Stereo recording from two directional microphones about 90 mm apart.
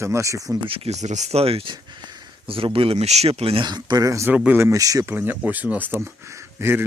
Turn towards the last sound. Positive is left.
turn(degrees=-30)  # may be behind; listen again after turning